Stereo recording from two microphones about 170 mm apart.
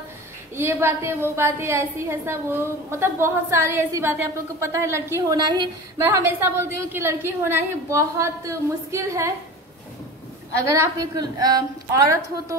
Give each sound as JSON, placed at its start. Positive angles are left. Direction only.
{"t": 0.6, "sound": "a woman's voice", "side_deg": -15}
{"t": 6.0, "sound": "a woman's voice", "side_deg": -10}
{"t": 10.6, "sound": "a woman's voice", "side_deg": -15}